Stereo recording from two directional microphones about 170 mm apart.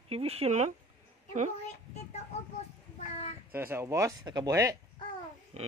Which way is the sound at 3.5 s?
15° right (ahead or behind).